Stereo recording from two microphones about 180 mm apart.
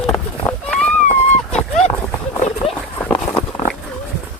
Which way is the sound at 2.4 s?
35° left (ahead or behind).